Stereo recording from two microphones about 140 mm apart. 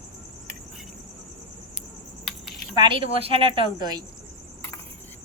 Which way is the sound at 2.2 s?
Centre (ahead or behind).